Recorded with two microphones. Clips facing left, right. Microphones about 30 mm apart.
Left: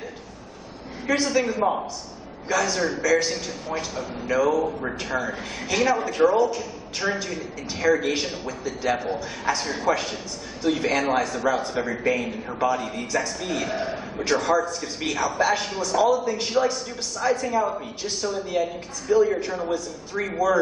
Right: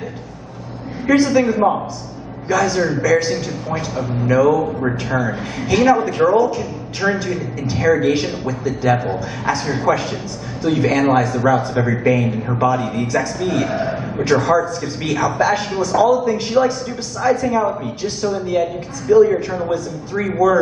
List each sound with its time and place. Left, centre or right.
1.0 s a man's voice: centre
1.4 s speech: centre
2.4 s a man's voice: centre
11.8 s speech: right
12.1 s a man's voice: centre
17.5 s speech: right
18.0 s a man's voice: centre
19.1 s speech: right
19.5 s a man's voice: centre